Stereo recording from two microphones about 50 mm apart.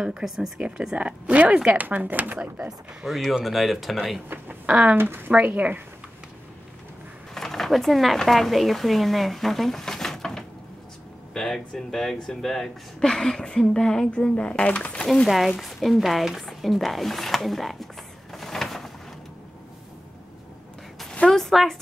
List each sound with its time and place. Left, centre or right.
0.0 s speech: centre; by 2.7 s right
3.1 s a woman's voice: centre
4.6 s speech: right
5.0 s speech: right
5.3 s speech: right
7.3 s a sound: centre
8.2 s speech: centre; by 15.0 s left
15.2 s a woman's voice: centre
18.3 s a sound: centre
21.3 s a sound: centre